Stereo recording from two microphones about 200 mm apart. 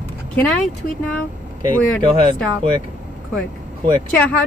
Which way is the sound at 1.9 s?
5° left (ahead or behind).